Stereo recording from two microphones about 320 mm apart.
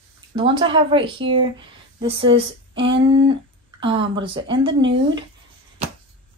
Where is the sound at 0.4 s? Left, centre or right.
Centre.